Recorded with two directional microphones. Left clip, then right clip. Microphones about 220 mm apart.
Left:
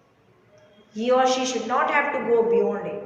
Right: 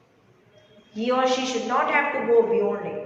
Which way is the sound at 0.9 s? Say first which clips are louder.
Left 2 dB; 20° left (ahead or behind).